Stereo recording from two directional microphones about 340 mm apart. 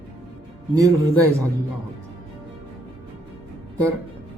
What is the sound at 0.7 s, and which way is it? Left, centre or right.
Speech, centre.